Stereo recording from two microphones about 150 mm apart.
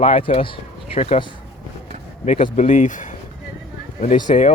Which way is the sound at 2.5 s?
55° left (ahead or behind).